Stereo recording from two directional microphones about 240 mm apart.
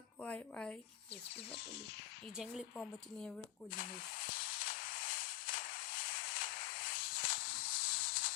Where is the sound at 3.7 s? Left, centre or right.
Left.